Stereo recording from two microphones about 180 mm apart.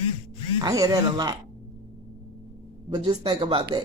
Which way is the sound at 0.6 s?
20° right (ahead or behind).